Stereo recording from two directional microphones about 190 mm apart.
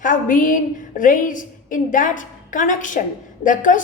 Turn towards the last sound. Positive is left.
turn(degrees=45)  # may be behind; listen again after turning